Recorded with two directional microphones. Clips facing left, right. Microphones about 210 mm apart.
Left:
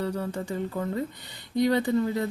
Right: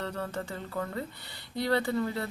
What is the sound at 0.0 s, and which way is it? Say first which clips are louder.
Speech: left 5 dB; 10° left (ahead or behind).